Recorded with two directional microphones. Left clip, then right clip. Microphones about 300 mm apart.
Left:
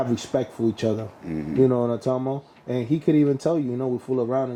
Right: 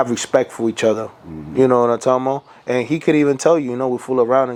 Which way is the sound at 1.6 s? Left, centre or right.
Centre.